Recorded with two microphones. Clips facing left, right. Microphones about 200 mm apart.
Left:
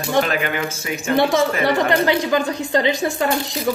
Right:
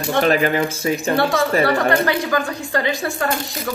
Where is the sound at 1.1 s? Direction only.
20° left (ahead or behind).